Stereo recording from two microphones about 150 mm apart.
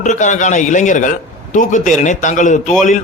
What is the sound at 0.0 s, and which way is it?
A man's voice, 55° left (ahead or behind).